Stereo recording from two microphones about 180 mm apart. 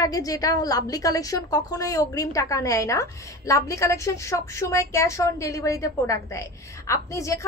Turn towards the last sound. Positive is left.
turn(degrees=15)  # may be behind; listen again after turning